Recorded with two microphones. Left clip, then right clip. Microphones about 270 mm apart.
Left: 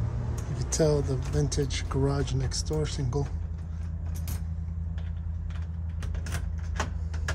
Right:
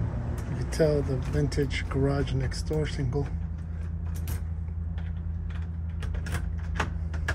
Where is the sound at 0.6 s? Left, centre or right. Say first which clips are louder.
Right 1 dB; left.